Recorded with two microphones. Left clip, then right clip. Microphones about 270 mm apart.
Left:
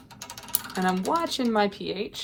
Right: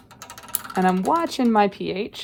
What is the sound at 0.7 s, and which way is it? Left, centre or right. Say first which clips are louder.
Speech: right 6 dB; right.